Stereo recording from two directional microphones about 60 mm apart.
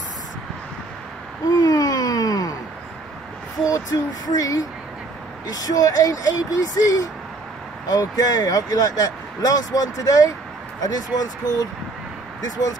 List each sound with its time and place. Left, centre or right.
1.5 s a sound: left
3.6 s speech: left
10.8 s speech: left